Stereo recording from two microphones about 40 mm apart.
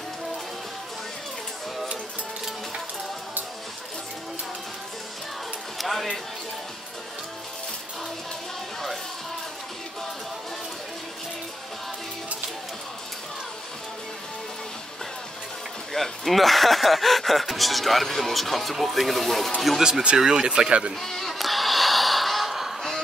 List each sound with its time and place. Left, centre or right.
5.8 s a sound: centre
15.9 s speech: centre
19.8 s speech: right
21.0 s music: centre